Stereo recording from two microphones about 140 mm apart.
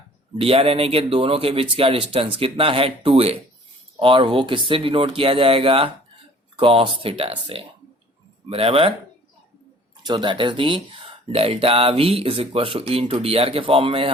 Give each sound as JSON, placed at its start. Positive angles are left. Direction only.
{"t": 0.3, "sound": "speech", "side_deg": -45}
{"t": 10.1, "sound": "speech", "side_deg": -35}